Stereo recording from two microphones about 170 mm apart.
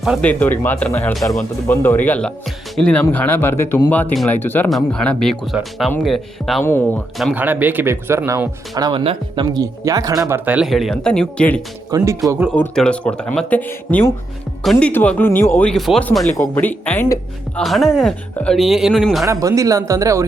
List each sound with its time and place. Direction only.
0.0 s speech: centre (ahead or behind)
0.3 s speech: 10° left (ahead or behind)
6.6 s speech: 15° left (ahead or behind)
7.3 s speech: 10° right (ahead or behind)
8.7 s speech: 25° right (ahead or behind); by 11.6 s 5° left (ahead or behind)
11.9 s speech: 20° right (ahead or behind)
12.5 s speech: 5° left (ahead or behind)
17.6 s speech: centre (ahead or behind)
19.2 s speech: 20° right (ahead or behind)